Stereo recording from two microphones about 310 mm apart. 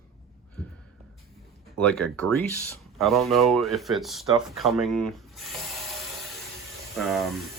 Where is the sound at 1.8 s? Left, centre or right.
Centre.